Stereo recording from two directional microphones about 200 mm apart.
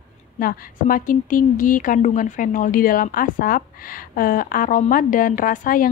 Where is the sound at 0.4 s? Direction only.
45° left (ahead or behind).